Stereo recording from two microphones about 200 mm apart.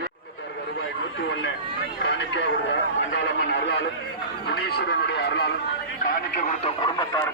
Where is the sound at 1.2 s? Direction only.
60° left (ahead or behind).